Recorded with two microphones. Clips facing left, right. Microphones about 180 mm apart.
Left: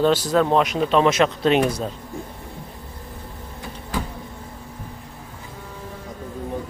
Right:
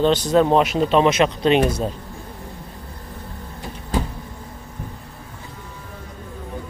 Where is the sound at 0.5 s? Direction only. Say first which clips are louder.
Right 2 dB; 5° right (ahead or behind).